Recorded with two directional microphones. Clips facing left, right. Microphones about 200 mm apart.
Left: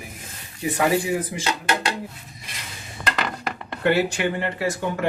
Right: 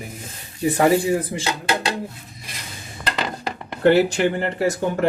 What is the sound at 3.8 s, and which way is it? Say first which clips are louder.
Speech: right 5 dB; 40° right (ahead or behind).